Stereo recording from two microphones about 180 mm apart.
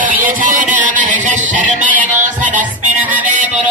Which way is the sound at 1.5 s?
45° right (ahead or behind).